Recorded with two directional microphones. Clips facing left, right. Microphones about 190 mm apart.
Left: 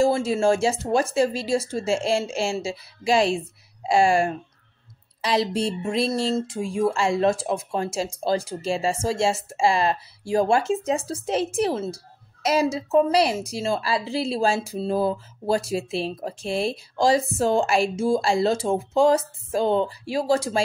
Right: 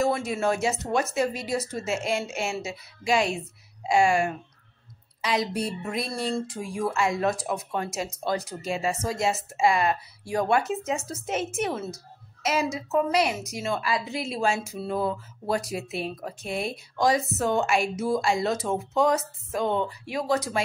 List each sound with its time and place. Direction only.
0.0 s a woman's voice: 30° left (ahead or behind)